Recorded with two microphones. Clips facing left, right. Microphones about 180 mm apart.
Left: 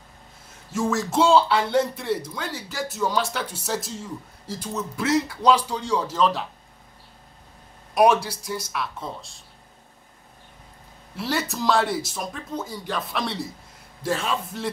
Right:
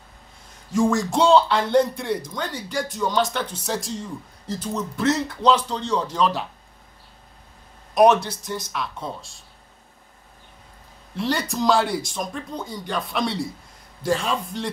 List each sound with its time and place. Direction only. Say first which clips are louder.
0.7 s speech: right 4 dB; 5° left (ahead or behind)
7.9 s speech: right 2 dB; 10° left (ahead or behind)
11.1 s speech: right 3 dB; 5° left (ahead or behind)